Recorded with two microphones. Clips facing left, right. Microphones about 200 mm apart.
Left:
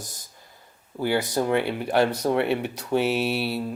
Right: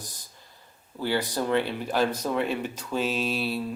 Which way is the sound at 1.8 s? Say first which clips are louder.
Left 4 dB; 65° left (ahead or behind).